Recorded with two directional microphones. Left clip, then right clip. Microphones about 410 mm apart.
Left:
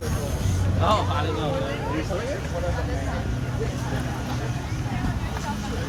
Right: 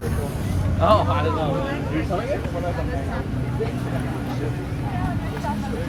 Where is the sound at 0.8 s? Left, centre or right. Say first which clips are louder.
Right 5 dB; centre.